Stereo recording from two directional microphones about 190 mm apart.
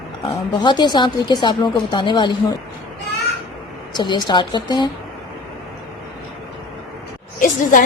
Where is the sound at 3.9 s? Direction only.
25° left (ahead or behind).